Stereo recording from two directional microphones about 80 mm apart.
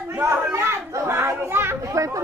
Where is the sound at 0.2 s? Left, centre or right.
Right.